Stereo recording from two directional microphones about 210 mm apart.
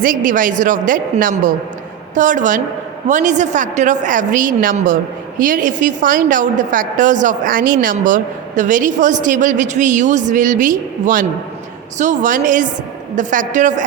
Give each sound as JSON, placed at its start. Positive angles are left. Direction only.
{"t": 0.0, "sound": "a woman's voice", "side_deg": -40}